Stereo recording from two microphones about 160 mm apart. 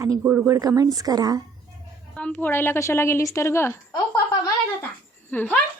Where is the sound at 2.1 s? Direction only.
10° left (ahead or behind).